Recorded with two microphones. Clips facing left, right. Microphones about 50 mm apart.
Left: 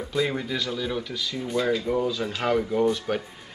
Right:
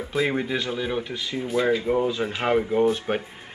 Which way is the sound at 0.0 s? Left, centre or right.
Centre.